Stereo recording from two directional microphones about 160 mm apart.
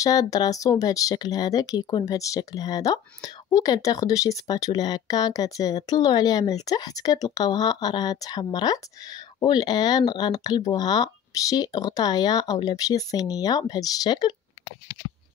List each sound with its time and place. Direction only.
0.0 s speech: 20° left (ahead or behind)